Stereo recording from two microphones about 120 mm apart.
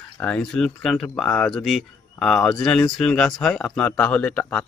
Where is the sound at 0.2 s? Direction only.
10° left (ahead or behind).